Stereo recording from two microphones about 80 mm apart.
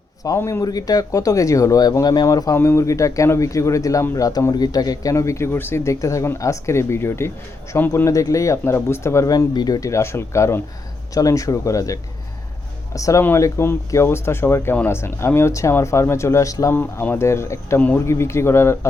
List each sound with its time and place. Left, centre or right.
0.2 s speech: left
9.3 s speech: left
9.8 s speech: left
11.1 s speech: left
16.7 s speech: left
17.7 s speech: left
18.0 s speech: left